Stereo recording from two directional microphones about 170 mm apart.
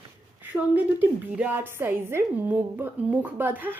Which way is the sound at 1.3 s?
10° right (ahead or behind).